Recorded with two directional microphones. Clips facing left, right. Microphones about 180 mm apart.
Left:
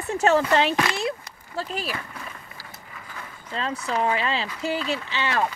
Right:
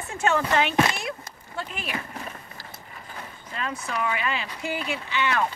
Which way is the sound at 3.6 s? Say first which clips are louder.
Left 4 dB; 30° left (ahead or behind).